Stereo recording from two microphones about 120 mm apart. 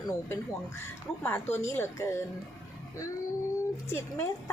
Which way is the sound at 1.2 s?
20° left (ahead or behind).